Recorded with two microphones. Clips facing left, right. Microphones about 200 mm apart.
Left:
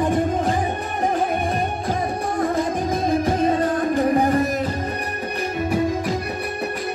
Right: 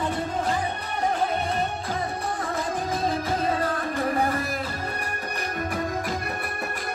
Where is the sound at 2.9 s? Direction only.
50° left (ahead or behind).